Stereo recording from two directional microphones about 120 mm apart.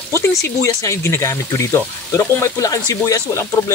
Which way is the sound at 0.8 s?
25° left (ahead or behind).